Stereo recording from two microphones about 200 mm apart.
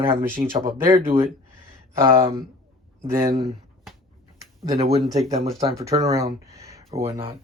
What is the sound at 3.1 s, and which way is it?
Speech, 15° right (ahead or behind).